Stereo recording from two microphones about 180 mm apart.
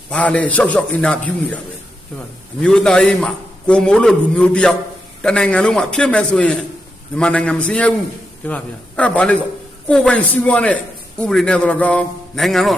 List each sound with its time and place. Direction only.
0.1 s a man's voice: 5° left (ahead or behind)